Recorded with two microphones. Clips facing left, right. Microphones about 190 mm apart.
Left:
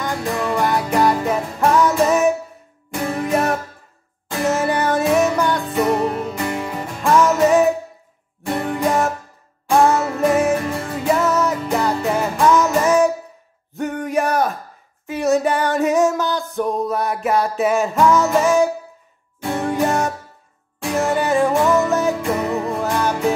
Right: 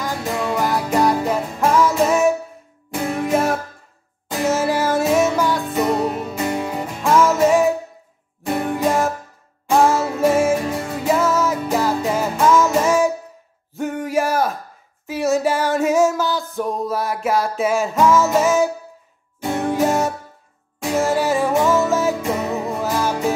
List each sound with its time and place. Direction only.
0.0 s music: 5° right (ahead or behind)
6.4 s music: 15° right (ahead or behind)
7.0 s music: centre (ahead or behind)
8.7 s music: centre (ahead or behind)
13.7 s a sound: centre (ahead or behind)
15.0 s music: centre (ahead or behind)